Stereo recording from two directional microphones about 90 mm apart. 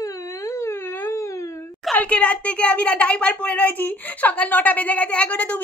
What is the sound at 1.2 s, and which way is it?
Wail, 35° left (ahead or behind).